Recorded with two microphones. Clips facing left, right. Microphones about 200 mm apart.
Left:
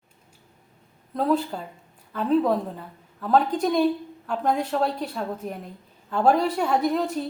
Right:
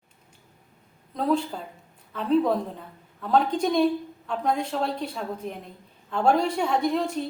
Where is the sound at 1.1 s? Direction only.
5° left (ahead or behind).